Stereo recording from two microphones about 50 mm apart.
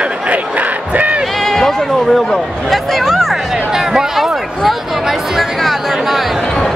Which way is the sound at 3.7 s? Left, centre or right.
Centre.